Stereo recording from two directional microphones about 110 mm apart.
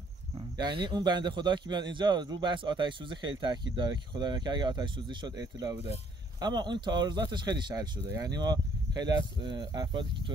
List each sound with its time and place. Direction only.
0.6 s speech: 45° right (ahead or behind)